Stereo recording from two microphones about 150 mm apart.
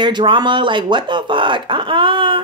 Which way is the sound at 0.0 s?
30° right (ahead or behind).